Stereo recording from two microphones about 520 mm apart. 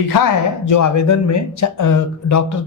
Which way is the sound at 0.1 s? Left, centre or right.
Left.